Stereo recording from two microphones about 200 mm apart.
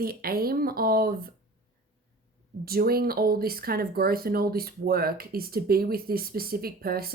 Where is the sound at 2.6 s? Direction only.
50° right (ahead or behind).